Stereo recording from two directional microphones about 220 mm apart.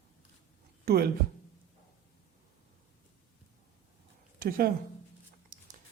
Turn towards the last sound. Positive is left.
turn(degrees=-40)  # may be behind; listen again after turning